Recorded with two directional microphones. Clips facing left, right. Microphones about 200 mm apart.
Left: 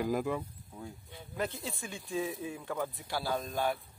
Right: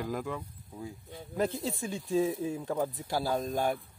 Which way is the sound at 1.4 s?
30° right (ahead or behind).